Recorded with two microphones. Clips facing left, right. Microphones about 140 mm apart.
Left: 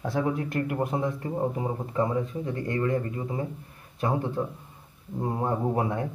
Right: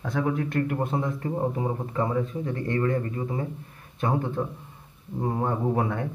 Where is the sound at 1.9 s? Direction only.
25° left (ahead or behind).